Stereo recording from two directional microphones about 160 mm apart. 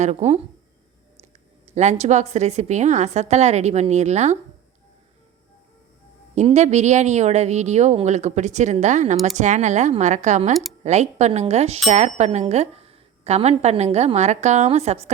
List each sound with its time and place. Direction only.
0.0 s speech: 45° right (ahead or behind)
1.7 s speech: 45° right (ahead or behind)
6.3 s speech: 45° right (ahead or behind)